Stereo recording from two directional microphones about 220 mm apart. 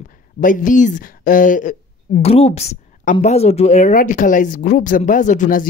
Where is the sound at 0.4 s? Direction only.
35° left (ahead or behind).